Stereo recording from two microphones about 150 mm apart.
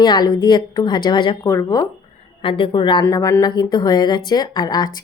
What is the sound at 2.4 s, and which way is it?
Speech, 35° left (ahead or behind).